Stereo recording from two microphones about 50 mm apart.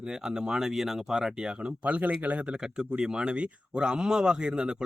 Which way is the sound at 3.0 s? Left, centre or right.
Centre.